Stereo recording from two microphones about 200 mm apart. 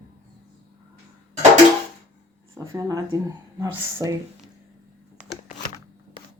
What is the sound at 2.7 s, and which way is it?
Speech, 15° right (ahead or behind).